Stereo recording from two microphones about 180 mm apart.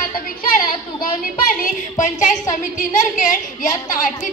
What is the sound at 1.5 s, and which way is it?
A woman's voice, 45° left (ahead or behind).